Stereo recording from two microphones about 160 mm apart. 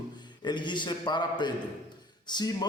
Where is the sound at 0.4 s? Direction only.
30° left (ahead or behind).